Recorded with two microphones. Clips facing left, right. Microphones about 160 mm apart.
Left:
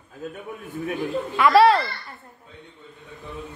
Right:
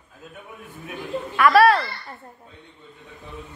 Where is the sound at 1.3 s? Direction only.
20° left (ahead or behind).